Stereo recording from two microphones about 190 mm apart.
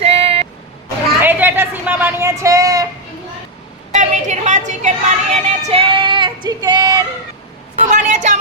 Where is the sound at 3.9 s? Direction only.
40° right (ahead or behind).